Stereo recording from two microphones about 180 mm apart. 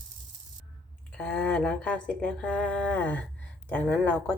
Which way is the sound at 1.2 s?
10° left (ahead or behind).